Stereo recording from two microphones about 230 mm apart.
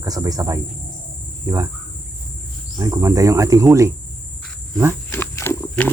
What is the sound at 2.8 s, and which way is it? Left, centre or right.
Speech, centre.